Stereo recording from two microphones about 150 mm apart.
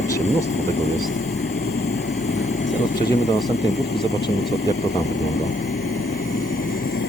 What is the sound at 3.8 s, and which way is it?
Speech, 90° left.